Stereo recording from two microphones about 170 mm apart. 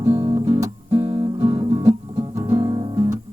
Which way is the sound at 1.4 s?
15° right (ahead or behind).